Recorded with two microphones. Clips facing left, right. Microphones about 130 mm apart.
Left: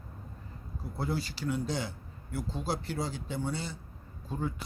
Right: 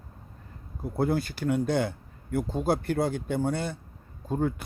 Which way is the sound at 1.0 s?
55° right (ahead or behind).